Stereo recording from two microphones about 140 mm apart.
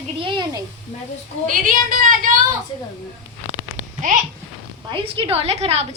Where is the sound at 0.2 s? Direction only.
35° right (ahead or behind).